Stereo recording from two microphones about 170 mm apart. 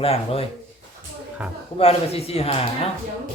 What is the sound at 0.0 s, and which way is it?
Speech, 35° left (ahead or behind).